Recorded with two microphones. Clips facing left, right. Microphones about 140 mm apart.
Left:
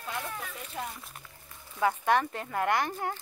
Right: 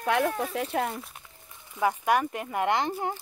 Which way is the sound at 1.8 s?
15° right (ahead or behind).